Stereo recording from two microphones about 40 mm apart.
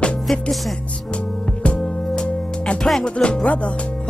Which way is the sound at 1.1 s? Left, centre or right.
Left.